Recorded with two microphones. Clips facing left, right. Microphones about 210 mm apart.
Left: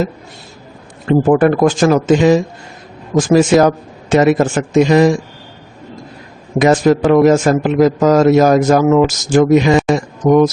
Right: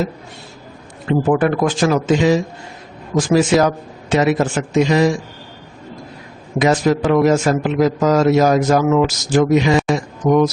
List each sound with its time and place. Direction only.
1.0 s a man's voice: 45° left (ahead or behind)
6.6 s a man's voice: 45° left (ahead or behind)